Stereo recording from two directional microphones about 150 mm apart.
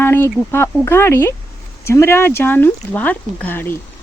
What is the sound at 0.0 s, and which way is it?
Speech, 15° left (ahead or behind).